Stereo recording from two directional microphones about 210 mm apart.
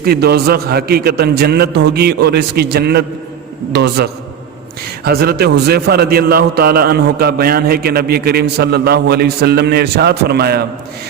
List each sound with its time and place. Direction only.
0.0 s a man's voice: 50° right (ahead or behind)